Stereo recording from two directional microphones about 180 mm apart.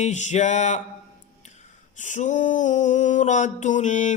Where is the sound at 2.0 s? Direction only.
45° left (ahead or behind).